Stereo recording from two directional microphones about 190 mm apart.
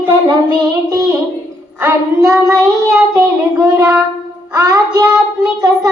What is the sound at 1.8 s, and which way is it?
Child singing, 15° right (ahead or behind).